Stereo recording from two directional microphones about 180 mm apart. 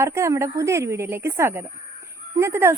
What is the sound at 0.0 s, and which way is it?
Speech, 15° right (ahead or behind).